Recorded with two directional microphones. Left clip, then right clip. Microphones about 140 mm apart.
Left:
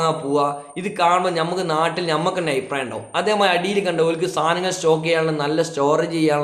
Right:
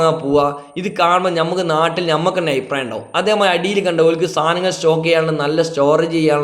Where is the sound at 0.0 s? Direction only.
30° right (ahead or behind).